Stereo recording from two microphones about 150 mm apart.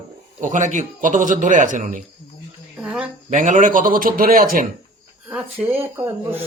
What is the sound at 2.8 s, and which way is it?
Speech, 5° right (ahead or behind).